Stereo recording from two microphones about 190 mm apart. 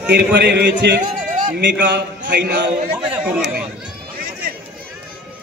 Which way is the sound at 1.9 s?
65° right (ahead or behind).